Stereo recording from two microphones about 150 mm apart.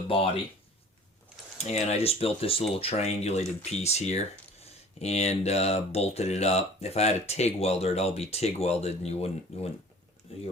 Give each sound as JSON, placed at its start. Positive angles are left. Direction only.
{"t": 1.5, "sound": "speech", "side_deg": 45}